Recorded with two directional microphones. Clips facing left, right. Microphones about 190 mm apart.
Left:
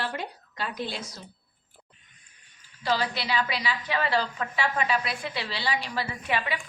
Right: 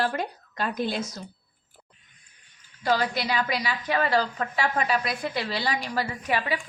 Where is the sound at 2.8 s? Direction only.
50° right (ahead or behind).